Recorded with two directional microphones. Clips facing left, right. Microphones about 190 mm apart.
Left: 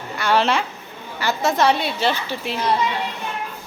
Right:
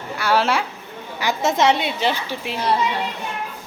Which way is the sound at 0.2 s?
10° right (ahead or behind).